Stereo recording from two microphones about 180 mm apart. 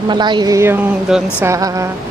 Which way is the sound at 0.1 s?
25° right (ahead or behind).